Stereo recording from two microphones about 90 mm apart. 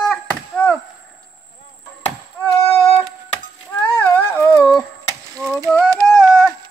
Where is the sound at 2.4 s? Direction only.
25° left (ahead or behind).